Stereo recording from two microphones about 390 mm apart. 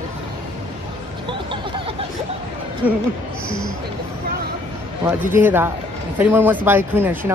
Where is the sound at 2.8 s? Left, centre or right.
Centre.